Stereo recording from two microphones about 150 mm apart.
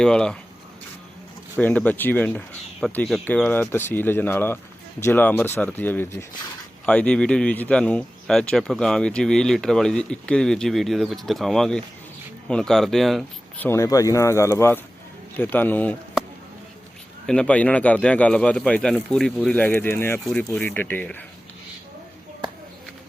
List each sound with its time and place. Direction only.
0.0 s speech: 5° left (ahead or behind)
1.5 s speech: 10° left (ahead or behind)
13.7 s speech: 20° left (ahead or behind)
17.2 s speech: 5° left (ahead or behind)
20.2 s speech: 5° left (ahead or behind)